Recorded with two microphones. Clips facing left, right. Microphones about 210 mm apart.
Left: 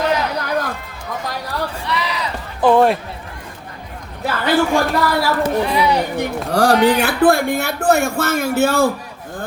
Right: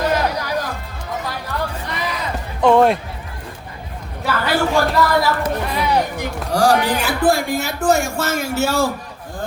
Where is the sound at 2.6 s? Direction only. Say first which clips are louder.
Even; centre (ahead or behind).